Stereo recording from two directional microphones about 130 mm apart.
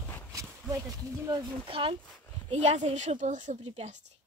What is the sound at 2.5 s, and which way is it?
A woman's voice, 60° right (ahead or behind).